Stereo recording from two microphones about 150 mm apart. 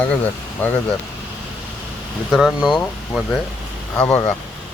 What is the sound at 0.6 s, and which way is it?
Speech, 10° left (ahead or behind).